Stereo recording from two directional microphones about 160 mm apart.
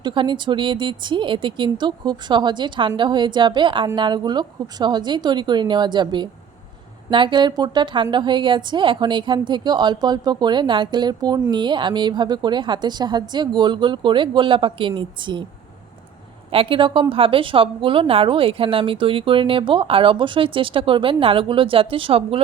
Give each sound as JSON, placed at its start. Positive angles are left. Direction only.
{"t": 0.0, "sound": "a woman's voice", "side_deg": -30}
{"t": 16.5, "sound": "a woman's voice", "side_deg": -35}